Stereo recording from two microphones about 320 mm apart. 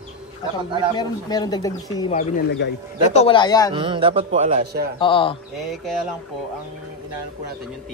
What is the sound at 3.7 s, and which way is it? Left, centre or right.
A man's voice, centre.